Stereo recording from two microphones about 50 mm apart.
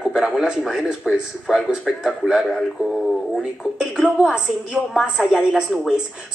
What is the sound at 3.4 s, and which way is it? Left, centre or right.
A woman's voice, centre.